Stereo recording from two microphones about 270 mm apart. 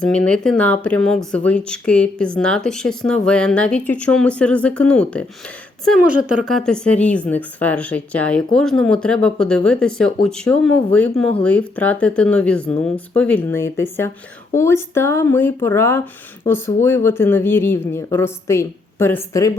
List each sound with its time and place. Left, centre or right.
0.0 s speech: centre